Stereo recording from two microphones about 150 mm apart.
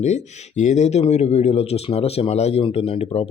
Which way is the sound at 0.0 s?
50° left (ahead or behind).